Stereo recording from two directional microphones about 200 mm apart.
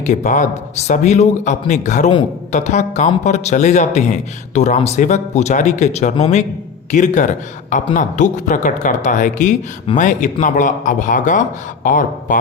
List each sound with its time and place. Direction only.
0.0 s speech: 35° left (ahead or behind)